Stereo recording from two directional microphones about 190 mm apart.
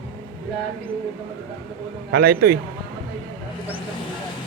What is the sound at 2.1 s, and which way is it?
Speech, 55° right (ahead or behind).